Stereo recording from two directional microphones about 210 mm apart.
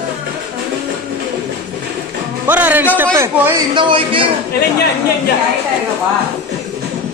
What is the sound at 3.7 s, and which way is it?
Speech, 25° right (ahead or behind).